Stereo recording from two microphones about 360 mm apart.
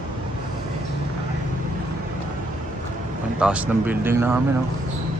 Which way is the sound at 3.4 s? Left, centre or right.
Centre.